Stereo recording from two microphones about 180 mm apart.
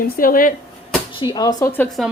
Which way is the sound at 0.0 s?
50° left (ahead or behind).